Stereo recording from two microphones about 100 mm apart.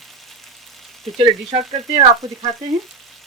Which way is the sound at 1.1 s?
65° right (ahead or behind).